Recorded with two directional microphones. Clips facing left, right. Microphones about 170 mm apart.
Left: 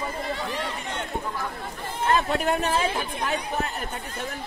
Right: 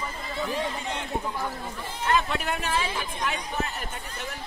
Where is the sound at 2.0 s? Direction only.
40° left (ahead or behind).